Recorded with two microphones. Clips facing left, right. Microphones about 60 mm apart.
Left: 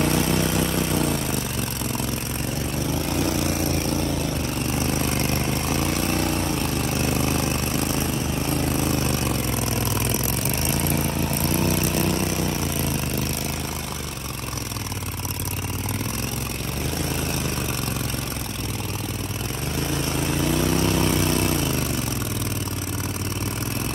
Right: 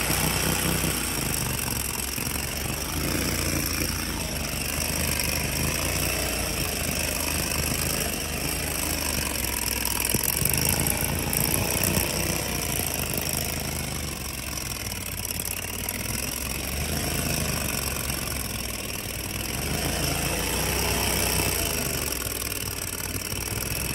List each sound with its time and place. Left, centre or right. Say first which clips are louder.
0.0 s vehicle: left 6 dB; centre
3.3 s vehicle: left 6 dB; right
4.7 s vehicle: left 6 dB; centre
5.7 s vehicle: left 6 dB; left
7.7 s vehicle: left 6 dB; right
8.8 s vehicle: left 7 dB; left
10.5 s vehicle: left 1 dB; right
19.9 s vehicle: left 6 dB; centre